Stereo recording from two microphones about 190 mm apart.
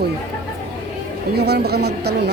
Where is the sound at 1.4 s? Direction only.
55° right (ahead or behind).